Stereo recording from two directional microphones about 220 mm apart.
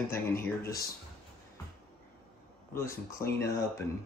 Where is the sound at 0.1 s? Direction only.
10° left (ahead or behind).